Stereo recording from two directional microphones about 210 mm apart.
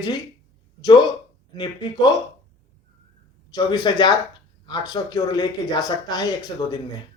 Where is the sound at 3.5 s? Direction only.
20° left (ahead or behind).